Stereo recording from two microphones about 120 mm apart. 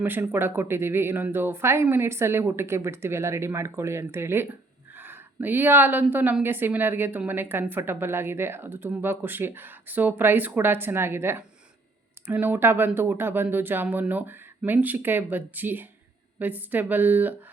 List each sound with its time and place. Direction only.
0.0 s a woman's voice: 15° right (ahead or behind)